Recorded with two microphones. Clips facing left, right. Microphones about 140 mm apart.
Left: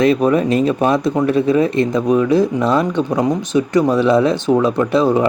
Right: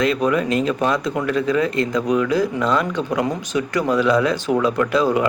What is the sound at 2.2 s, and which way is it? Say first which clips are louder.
Speech: left 5 dB; 25° left (ahead or behind).